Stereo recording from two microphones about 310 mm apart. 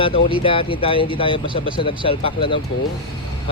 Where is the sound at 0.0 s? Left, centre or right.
Centre.